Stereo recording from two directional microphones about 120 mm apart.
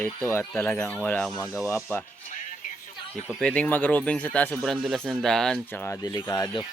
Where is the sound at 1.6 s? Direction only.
25° left (ahead or behind).